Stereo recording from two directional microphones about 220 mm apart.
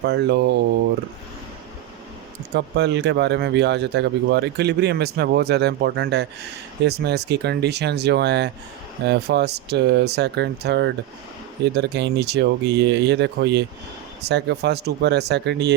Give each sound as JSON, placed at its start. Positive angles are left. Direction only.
{"t": 0.0, "sound": "speech", "side_deg": -50}
{"t": 2.6, "sound": "speech", "side_deg": -50}